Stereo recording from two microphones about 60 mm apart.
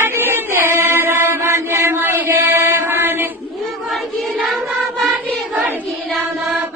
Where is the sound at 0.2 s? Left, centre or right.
Right.